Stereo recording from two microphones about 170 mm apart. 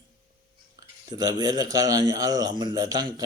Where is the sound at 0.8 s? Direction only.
25° right (ahead or behind).